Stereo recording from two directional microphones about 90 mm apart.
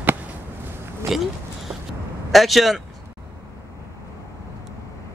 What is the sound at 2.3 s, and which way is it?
Speech, centre (ahead or behind).